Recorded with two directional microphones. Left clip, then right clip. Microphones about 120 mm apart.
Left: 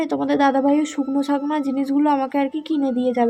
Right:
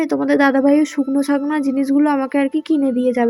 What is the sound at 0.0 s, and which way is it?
Speech, 25° right (ahead or behind).